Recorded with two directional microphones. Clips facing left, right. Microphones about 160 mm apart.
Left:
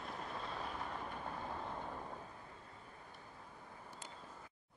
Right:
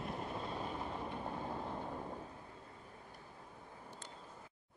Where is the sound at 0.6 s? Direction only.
20° right (ahead or behind).